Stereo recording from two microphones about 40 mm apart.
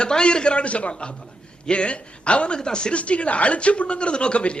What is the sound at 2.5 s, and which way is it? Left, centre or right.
Speech, centre.